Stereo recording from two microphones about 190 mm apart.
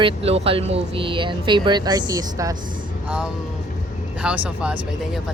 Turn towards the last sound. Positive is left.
turn(degrees=-5)  # may be behind; listen again after turning